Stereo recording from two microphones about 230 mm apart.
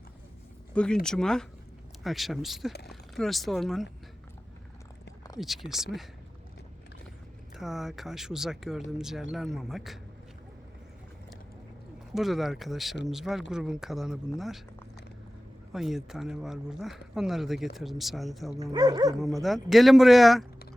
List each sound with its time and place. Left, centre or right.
0.7 s speech: centre
2.7 s speech: left
3.2 s speech: centre
5.4 s speech: centre
7.5 s speech: centre
12.1 s speech: centre
15.7 s speech: centre
18.6 s speech: centre
19.7 s speech: centre